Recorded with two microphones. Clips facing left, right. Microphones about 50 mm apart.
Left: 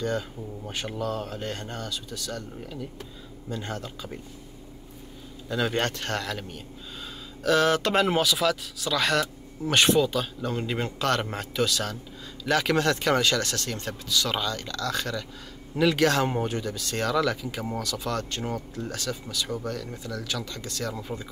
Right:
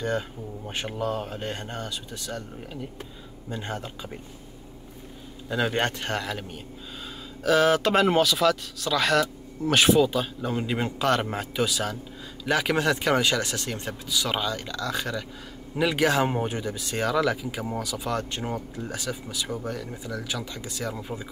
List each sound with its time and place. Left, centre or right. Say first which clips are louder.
0.7 s speech: right 2 dB; right
5.5 s speech: right 1 dB; centre